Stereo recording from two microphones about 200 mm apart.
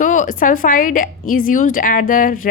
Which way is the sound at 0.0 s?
40° left (ahead or behind).